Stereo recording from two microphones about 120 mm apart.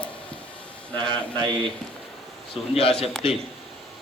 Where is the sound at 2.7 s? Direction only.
55° left (ahead or behind).